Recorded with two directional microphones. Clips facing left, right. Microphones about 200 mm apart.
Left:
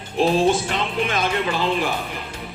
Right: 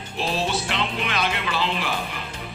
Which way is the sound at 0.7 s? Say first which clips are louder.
Left 3 dB; 45° left (ahead or behind).